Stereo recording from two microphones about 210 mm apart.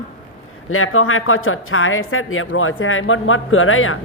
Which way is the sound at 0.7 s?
80° left.